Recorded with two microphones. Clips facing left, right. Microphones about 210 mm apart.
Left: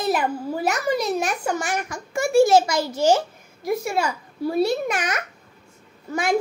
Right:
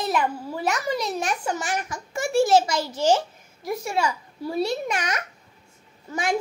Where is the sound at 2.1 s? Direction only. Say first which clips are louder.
Left 3 dB; 10° left (ahead or behind).